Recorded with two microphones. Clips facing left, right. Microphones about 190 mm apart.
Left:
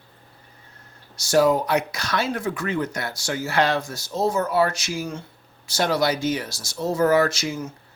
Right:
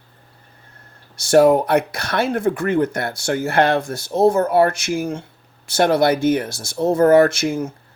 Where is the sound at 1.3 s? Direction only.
60° right (ahead or behind).